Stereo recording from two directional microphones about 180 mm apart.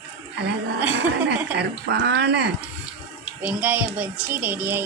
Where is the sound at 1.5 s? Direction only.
70° right (ahead or behind).